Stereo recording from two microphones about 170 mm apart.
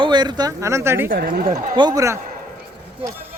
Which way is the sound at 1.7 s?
25° right (ahead or behind).